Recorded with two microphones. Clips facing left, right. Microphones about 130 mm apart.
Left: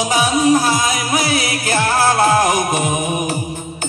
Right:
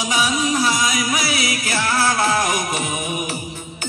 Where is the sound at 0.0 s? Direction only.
50° left (ahead or behind).